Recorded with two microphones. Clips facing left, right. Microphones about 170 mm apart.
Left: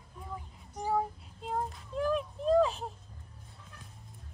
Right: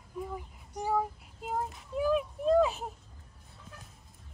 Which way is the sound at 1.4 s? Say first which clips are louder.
Even; 5° right (ahead or behind).